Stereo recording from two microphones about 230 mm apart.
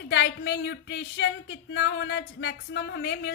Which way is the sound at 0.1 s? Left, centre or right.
Left.